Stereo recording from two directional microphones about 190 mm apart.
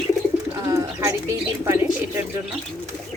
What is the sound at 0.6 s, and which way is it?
Speech, 15° right (ahead or behind).